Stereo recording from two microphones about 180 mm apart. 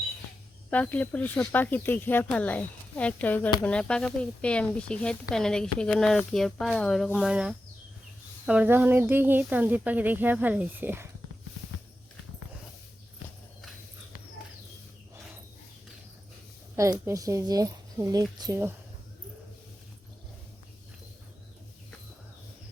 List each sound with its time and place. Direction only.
0.7 s speech: 10° left (ahead or behind); by 11.1 s 10° right (ahead or behind)
16.7 s speech: 15° right (ahead or behind)